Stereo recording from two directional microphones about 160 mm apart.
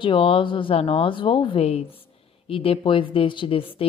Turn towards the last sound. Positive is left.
turn(degrees=35)  # may be behind; listen again after turning